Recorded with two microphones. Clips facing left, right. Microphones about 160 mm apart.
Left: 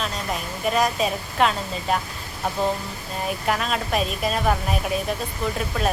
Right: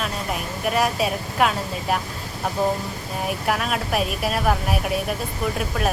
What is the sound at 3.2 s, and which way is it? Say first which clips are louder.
Speech: even; 5° right (ahead or behind).